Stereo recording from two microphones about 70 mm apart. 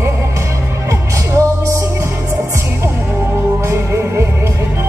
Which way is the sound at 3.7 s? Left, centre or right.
Right.